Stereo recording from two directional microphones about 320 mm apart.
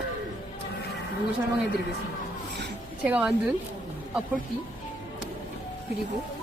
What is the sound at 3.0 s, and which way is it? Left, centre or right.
Speech, centre.